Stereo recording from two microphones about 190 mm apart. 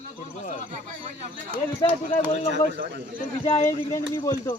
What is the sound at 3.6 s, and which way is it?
Speech, 15° left (ahead or behind).